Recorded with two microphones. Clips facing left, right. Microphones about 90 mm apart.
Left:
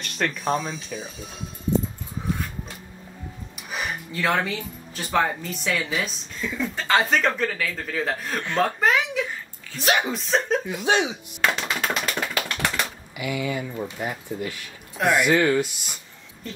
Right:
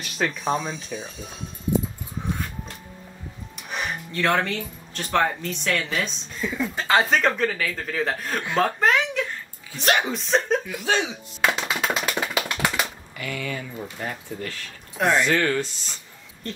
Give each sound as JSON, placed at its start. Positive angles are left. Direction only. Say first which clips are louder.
{"t": 0.0, "sound": "speech", "louder": "even", "side_deg": -5}
{"t": 3.5, "sound": "speech", "louder": "right 1 dB", "side_deg": 0}
{"t": 8.5, "sound": "a sound", "louder": "right 1 dB", "side_deg": 0}
{"t": 9.8, "sound": "speech", "louder": "even", "side_deg": 0}
{"t": 10.6, "sound": "speech", "louder": "left 2 dB", "side_deg": 20}
{"t": 11.4, "sound": "typewriter", "louder": "right 1 dB", "side_deg": -5}
{"t": 13.1, "sound": "speech", "louder": "left 4 dB", "side_deg": 10}